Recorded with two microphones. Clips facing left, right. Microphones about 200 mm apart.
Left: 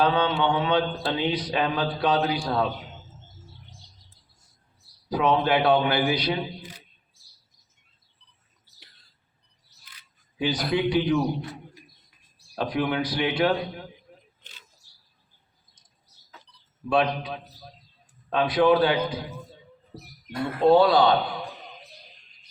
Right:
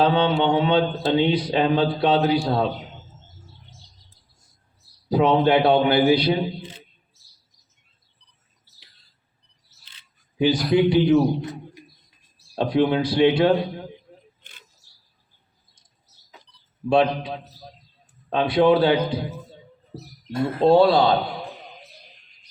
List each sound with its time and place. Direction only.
0.0 s speech: 25° right (ahead or behind)
5.0 s speech: 25° right (ahead or behind)
9.8 s a sound: 25° right (ahead or behind)
10.7 s a man's voice: 25° right (ahead or behind)
14.4 s a sound: 55° right (ahead or behind)
16.9 s speech: 25° right (ahead or behind)